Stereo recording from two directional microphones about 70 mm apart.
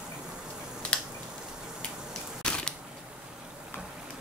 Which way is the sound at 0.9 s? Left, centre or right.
Centre.